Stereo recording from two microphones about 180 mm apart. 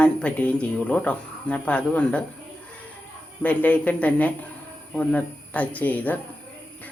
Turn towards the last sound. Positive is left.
turn(degrees=10)  # may be behind; listen again after turning